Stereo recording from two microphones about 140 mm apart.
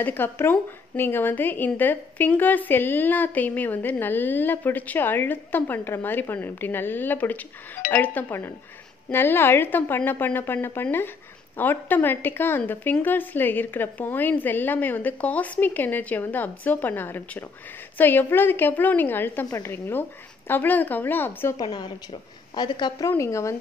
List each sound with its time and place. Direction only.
0.0 s a woman's voice: 15° left (ahead or behind)
21.6 s a woman's voice: 40° left (ahead or behind)
23.0 s speech: 20° left (ahead or behind)